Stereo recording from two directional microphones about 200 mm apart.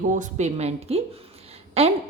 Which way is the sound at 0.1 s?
35° right (ahead or behind).